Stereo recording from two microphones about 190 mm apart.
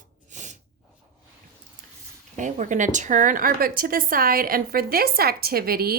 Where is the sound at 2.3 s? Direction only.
40° right (ahead or behind).